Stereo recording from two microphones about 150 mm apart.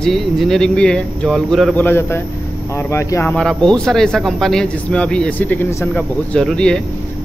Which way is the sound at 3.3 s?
5° left (ahead or behind).